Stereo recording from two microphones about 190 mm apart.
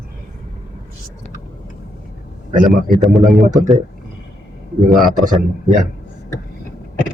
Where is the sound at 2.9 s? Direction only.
Centre (ahead or behind).